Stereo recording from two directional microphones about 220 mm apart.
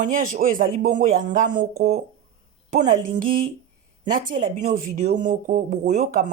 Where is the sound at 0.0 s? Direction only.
35° right (ahead or behind).